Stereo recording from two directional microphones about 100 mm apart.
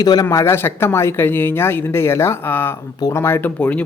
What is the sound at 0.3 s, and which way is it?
A man's voice, 30° left (ahead or behind).